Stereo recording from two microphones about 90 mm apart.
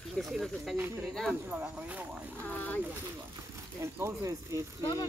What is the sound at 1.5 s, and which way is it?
Speech, 20° right (ahead or behind).